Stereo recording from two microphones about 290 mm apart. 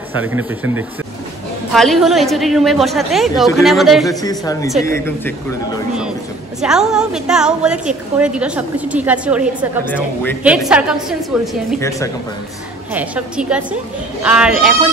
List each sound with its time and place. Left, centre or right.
0.2 s a woman's voice: centre
4.1 s speech: centre
6.6 s a woman's voice: centre
12.9 s a woman's voice: centre